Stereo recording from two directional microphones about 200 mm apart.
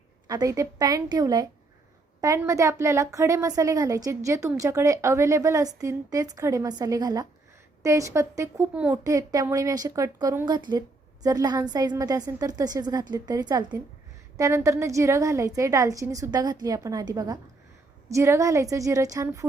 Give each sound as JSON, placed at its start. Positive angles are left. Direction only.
{"t": 0.3, "sound": "a woman's voice", "side_deg": -15}